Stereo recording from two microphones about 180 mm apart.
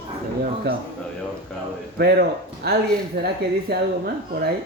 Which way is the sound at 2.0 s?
60° right (ahead or behind).